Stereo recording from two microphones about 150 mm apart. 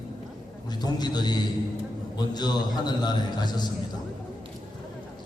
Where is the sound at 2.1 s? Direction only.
30° left (ahead or behind).